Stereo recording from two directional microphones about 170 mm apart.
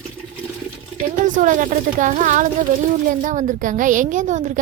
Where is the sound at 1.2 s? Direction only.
50° right (ahead or behind).